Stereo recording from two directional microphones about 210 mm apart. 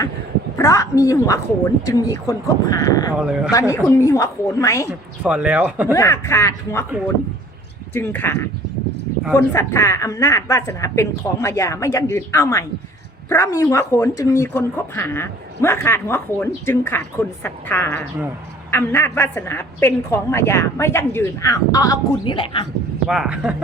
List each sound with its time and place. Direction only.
0.5 s speech: 15° left (ahead or behind)
3.2 s speech: 5° right (ahead or behind)
3.5 s speech: 15° left (ahead or behind)
4.9 s speech: 5° right (ahead or behind)
5.9 s speech: 15° left (ahead or behind)
7.9 s speech: 10° left (ahead or behind)
23.0 s speech: 5° right (ahead or behind)